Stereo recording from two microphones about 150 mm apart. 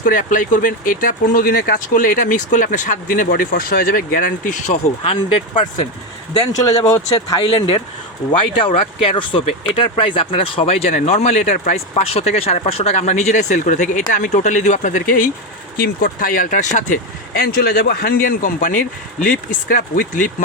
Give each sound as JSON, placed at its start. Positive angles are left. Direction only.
{"t": 0.0, "sound": "speech", "side_deg": 65}
{"t": 6.6, "sound": "speech", "side_deg": 20}
{"t": 7.3, "sound": "speech", "side_deg": 35}
{"t": 15.8, "sound": "speech", "side_deg": 80}
{"t": 17.3, "sound": "speech", "side_deg": 90}